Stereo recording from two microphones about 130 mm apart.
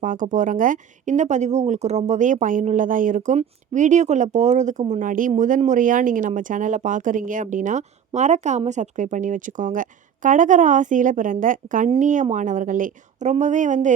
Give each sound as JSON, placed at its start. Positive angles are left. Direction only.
{"t": 0.0, "sound": "speech", "side_deg": -85}
{"t": 5.4, "sound": "speech", "side_deg": -70}
{"t": 11.9, "sound": "speech", "side_deg": -75}